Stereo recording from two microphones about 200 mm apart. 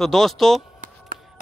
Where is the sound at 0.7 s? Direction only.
45° right (ahead or behind).